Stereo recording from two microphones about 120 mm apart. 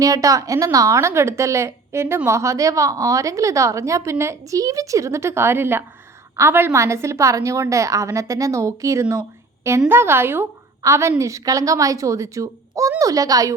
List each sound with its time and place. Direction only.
0.0 s a woman's voice: 30° right (ahead or behind)